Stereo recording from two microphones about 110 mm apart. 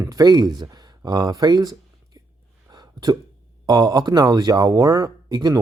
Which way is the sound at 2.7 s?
35° right (ahead or behind).